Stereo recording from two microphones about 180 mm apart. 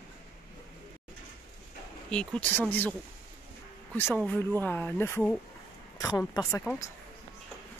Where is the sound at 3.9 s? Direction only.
10° left (ahead or behind).